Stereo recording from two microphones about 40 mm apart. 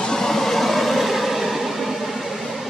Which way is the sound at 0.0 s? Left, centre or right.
Centre.